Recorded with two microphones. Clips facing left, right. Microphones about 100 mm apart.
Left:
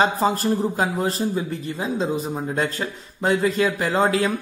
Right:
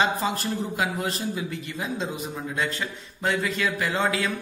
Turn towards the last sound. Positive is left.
turn(degrees=40)  # may be behind; listen again after turning